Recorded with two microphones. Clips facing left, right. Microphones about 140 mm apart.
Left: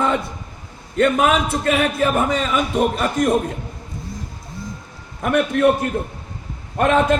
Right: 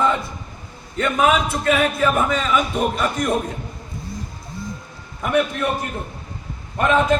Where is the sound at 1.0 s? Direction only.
55° left (ahead or behind).